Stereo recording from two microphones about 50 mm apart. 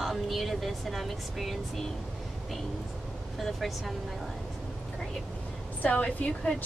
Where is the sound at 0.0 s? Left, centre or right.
Centre.